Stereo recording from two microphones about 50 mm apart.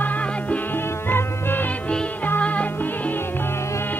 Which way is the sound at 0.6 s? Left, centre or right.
Left.